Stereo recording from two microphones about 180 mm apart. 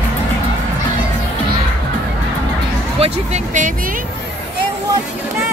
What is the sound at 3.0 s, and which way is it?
Speech, 40° right (ahead or behind).